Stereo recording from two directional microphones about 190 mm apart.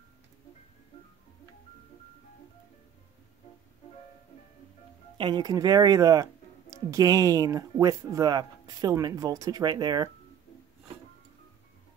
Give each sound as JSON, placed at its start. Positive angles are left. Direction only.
{"t": 5.1, "sound": "speech", "side_deg": -25}